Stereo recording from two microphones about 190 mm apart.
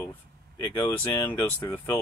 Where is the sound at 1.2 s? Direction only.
10° left (ahead or behind).